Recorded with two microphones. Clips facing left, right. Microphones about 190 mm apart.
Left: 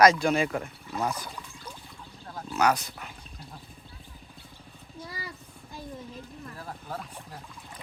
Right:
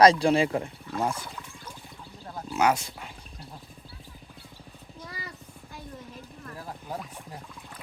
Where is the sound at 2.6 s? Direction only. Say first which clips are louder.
Right 1 dB; 25° right (ahead or behind).